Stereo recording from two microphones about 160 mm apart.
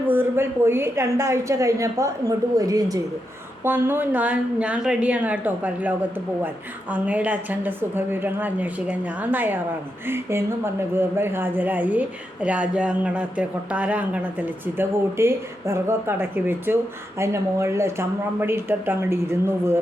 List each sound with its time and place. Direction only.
0.0 s speech: 15° right (ahead or behind)